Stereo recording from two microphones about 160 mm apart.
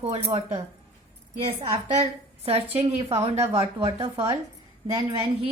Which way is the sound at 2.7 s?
40° right (ahead or behind).